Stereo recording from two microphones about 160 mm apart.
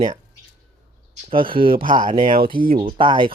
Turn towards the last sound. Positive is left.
turn(degrees=-30)  # may be behind; listen again after turning